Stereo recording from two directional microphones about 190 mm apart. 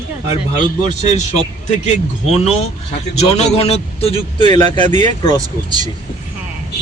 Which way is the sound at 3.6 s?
30° left (ahead or behind).